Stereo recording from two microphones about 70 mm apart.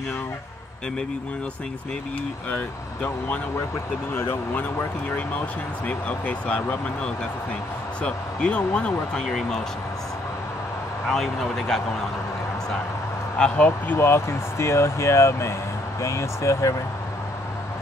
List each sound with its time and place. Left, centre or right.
2.5 s speech: centre
4.1 s speech: left
4.6 s speech: left; by 9.6 s centre
11.1 s speech: centre
13.7 s speech: left